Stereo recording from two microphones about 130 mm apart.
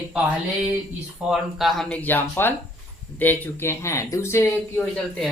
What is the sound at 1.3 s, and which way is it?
Speech, centre (ahead or behind).